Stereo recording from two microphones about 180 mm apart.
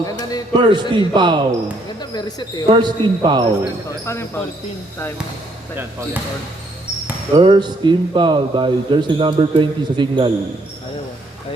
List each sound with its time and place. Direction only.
0.0 s a sound: 20° left (ahead or behind)
0.5 s a man's voice: 25° right (ahead or behind)
2.0 s speech: 25° left (ahead or behind)
2.6 s a man's voice: 25° right (ahead or behind)
4.0 s speech: 15° left (ahead or behind)
7.3 s a man's voice: 25° right (ahead or behind)